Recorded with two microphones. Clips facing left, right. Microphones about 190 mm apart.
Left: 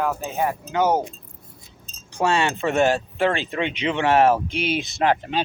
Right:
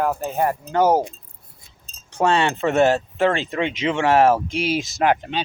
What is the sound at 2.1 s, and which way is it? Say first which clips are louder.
Speech: right 2 dB; 25° right (ahead or behind).